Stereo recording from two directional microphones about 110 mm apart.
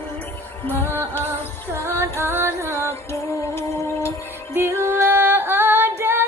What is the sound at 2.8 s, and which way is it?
Music, 25° left (ahead or behind).